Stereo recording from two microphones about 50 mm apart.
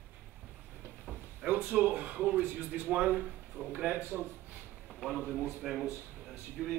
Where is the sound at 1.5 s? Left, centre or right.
Right.